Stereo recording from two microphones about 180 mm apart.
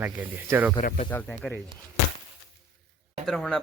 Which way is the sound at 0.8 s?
45° left (ahead or behind).